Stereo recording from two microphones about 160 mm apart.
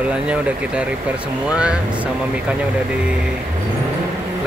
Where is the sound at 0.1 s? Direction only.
5° right (ahead or behind).